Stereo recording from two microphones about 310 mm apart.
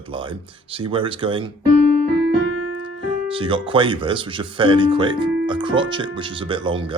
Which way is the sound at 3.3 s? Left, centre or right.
Centre.